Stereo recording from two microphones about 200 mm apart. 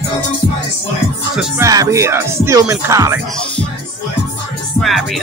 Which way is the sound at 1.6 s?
15° right (ahead or behind).